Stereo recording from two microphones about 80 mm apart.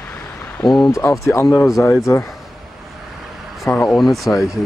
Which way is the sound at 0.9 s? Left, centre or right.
Left.